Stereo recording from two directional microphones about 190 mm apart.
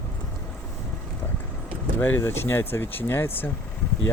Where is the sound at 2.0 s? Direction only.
10° left (ahead or behind).